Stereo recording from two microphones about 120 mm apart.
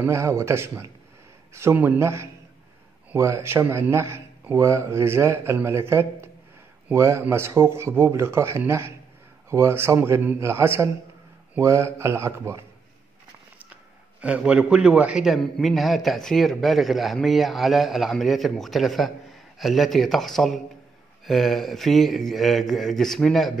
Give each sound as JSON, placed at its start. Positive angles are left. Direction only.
{"t": 0.0, "sound": "a man's voice", "side_deg": -20}
{"t": 14.2, "sound": "a man's voice", "side_deg": -10}